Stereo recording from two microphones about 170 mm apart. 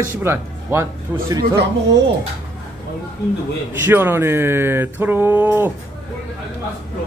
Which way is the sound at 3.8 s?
15° right (ahead or behind).